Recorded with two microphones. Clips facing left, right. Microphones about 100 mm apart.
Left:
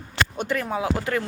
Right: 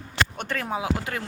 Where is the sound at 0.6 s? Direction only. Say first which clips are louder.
Left 2 dB; 15° right (ahead or behind).